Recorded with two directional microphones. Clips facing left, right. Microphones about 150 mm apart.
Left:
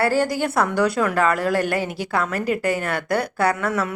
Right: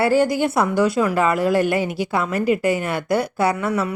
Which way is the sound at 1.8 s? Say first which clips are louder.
Right 4 dB; 45° left (ahead or behind).